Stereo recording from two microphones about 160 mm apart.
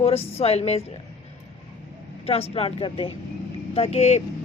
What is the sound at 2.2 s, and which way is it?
Speech, 40° left (ahead or behind).